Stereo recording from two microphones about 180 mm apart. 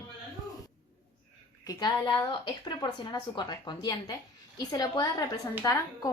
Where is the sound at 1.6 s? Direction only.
20° left (ahead or behind).